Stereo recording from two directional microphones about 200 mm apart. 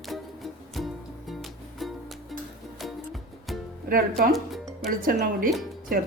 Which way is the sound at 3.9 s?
45° right (ahead or behind).